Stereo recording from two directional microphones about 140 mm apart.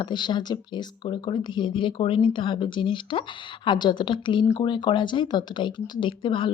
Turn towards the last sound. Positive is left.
turn(degrees=35)  # may be behind; listen again after turning